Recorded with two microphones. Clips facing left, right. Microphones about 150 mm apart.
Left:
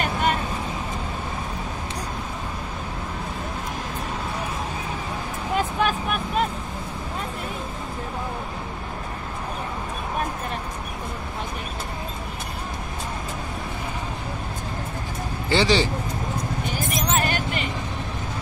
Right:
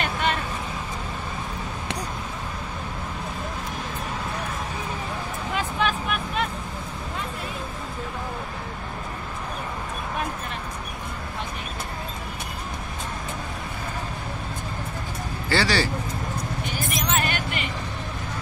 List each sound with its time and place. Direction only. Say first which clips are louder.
5.8 s vehicle: left 2 dB; 45° left (ahead or behind)
15.5 s speech: left 3 dB; 20° left (ahead or behind)
17.0 s vehicle: left 2 dB; 40° left (ahead or behind)